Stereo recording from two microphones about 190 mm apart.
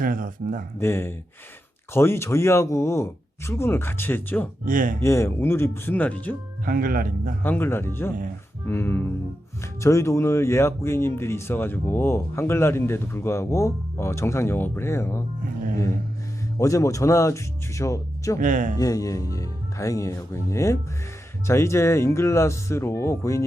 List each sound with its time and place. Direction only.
0.0 s speech: 45° right (ahead or behind)
0.8 s speech: 10° left (ahead or behind)
4.6 s speech: 45° right (ahead or behind)
5.0 s speech: 15° left (ahead or behind)
6.7 s speech: 50° right (ahead or behind)
7.4 s speech: 10° left (ahead or behind)
16.6 s speech: 15° left (ahead or behind)
18.3 s speech: 45° right (ahead or behind)
18.8 s speech: 20° left (ahead or behind)